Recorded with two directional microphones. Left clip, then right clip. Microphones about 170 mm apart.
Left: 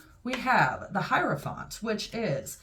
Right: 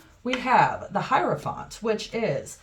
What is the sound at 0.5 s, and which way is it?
Speech, 25° right (ahead or behind).